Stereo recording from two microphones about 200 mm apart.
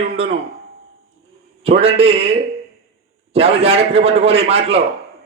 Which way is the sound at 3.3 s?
30° right (ahead or behind).